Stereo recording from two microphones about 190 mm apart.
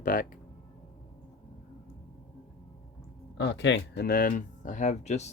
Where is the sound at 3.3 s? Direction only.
65° left (ahead or behind); by 5.3 s 35° left (ahead or behind).